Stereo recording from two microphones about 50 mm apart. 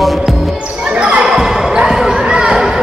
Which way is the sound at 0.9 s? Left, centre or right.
Right.